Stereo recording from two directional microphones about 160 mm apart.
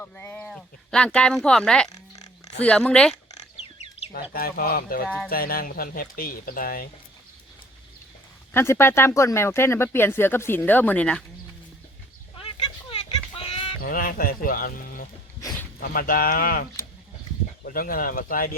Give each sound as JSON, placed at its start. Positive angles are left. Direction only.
{"t": 0.0, "sound": "speech", "side_deg": 10}
{"t": 4.1, "sound": "speech", "side_deg": 65}
{"t": 8.5, "sound": "speech", "side_deg": 15}
{"t": 12.4, "sound": "a sound", "side_deg": 35}
{"t": 13.8, "sound": "speech", "side_deg": 60}